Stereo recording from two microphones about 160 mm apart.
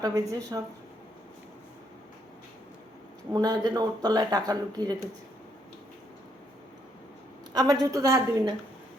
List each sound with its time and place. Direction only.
0.0 s speech: 20° right (ahead or behind)
3.3 s speech: 25° right (ahead or behind)
7.5 s speech: 25° right (ahead or behind)